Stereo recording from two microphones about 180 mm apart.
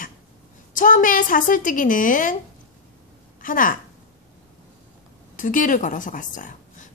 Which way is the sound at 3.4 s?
50° left (ahead or behind).